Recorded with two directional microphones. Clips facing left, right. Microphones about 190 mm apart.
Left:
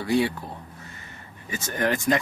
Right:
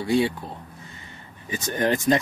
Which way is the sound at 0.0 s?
20° right (ahead or behind).